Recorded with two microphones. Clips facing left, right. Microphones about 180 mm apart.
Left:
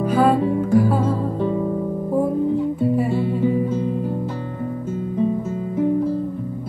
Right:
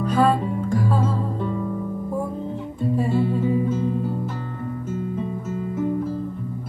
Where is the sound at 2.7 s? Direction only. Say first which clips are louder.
Left 3 dB; 10° left (ahead or behind).